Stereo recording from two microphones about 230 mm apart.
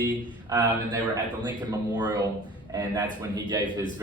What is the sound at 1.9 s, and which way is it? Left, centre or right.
Speech, centre.